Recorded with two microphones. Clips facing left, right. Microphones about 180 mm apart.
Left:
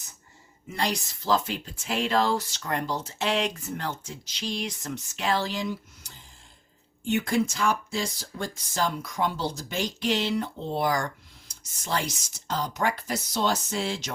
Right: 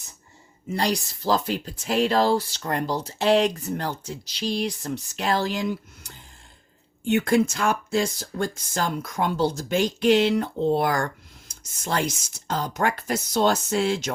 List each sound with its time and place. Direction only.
0.7 s speech: 35° right (ahead or behind); by 14.1 s 50° right (ahead or behind)